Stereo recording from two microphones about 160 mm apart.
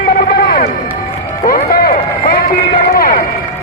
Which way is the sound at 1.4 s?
65° left (ahead or behind).